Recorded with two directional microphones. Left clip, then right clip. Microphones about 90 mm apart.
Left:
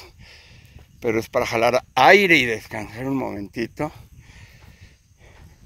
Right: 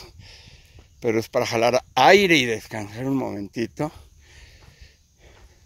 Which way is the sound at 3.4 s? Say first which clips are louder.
Even; 30° right (ahead or behind).